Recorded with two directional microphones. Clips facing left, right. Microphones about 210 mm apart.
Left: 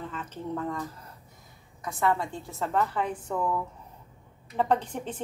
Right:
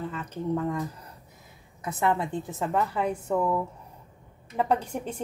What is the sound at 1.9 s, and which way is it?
Speech, 20° right (ahead or behind).